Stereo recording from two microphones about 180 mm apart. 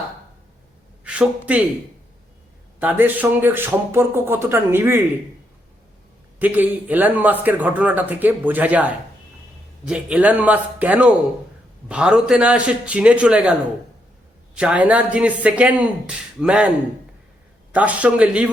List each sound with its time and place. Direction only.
1.0 s speech: 5° right (ahead or behind)
2.8 s speech: 10° right (ahead or behind)
6.4 s a man's voice: 10° right (ahead or behind)